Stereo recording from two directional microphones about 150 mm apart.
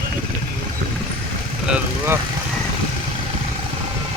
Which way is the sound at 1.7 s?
15° right (ahead or behind).